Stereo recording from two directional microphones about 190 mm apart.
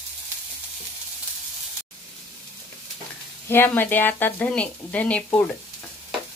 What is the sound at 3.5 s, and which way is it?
Speech, 10° left (ahead or behind).